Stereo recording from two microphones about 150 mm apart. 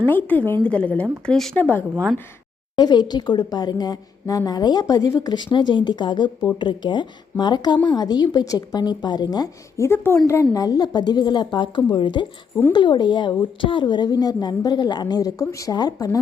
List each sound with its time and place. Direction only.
0.1 s a woman's voice: 10° left (ahead or behind)
2.7 s a woman's voice: 30° left (ahead or behind)